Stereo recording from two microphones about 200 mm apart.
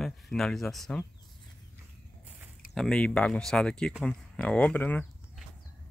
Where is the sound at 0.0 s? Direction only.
Centre (ahead or behind).